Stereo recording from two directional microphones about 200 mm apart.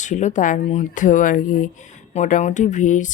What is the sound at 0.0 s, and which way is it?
Speech, 35° left (ahead or behind).